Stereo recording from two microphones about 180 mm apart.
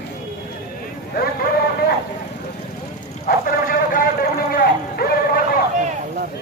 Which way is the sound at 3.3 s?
50° left (ahead or behind).